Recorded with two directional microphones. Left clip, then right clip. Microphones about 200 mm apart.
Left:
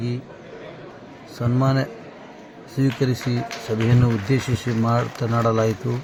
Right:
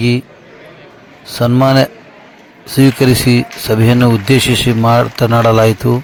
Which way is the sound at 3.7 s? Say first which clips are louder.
Right 12 dB; 60° right (ahead or behind).